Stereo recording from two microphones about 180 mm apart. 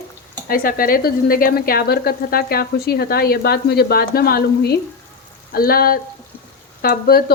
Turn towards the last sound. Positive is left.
turn(degrees=60)  # may be behind; listen again after turning